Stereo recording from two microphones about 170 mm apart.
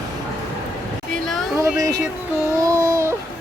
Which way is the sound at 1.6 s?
20° right (ahead or behind).